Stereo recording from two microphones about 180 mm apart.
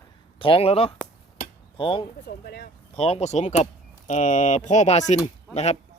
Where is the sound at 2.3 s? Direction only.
60° left (ahead or behind).